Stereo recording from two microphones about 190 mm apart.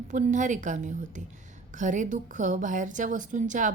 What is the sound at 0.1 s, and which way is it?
A woman's voice, 40° right (ahead or behind).